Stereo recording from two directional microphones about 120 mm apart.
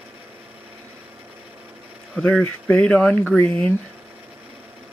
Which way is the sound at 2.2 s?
15° left (ahead or behind).